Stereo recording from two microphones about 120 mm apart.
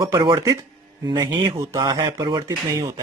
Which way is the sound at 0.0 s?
40° right (ahead or behind).